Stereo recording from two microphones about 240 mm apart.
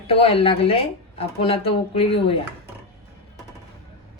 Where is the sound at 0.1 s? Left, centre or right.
Left.